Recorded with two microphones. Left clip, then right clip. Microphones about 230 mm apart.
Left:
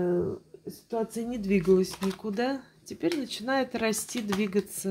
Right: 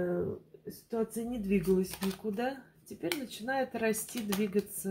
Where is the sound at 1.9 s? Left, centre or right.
Left.